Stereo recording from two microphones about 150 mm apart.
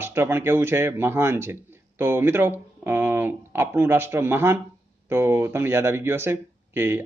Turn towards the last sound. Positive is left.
turn(degrees=-15)  # may be behind; listen again after turning